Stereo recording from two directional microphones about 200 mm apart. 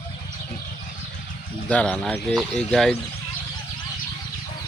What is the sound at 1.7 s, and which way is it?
Speech, 5° left (ahead or behind).